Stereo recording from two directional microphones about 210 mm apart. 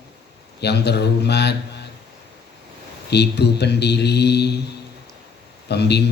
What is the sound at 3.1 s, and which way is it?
Speech, 50° left (ahead or behind).